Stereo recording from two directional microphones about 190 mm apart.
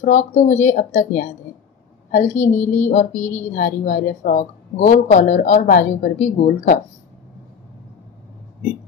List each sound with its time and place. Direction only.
0.0 s a woman's voice: 40° left (ahead or behind)